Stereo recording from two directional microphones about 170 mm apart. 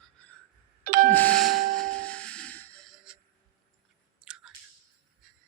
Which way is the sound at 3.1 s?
5° right (ahead or behind).